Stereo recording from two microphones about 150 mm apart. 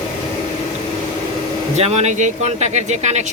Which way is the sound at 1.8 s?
45° right (ahead or behind).